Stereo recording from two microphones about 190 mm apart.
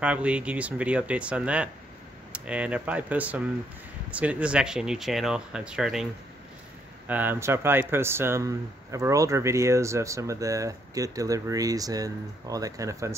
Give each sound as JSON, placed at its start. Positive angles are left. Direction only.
{"t": 0.0, "sound": "speech", "side_deg": -5}
{"t": 7.1, "sound": "speech", "side_deg": -10}